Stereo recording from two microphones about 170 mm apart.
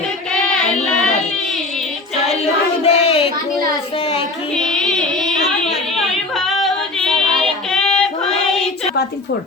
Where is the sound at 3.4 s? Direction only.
20° left (ahead or behind).